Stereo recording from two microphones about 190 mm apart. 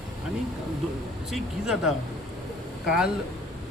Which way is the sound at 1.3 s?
Centre (ahead or behind).